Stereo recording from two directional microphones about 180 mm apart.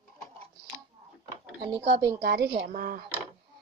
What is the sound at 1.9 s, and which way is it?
A woman's voice, 65° right (ahead or behind).